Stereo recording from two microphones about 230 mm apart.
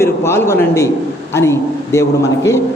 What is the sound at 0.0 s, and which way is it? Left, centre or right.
A man's voice, centre.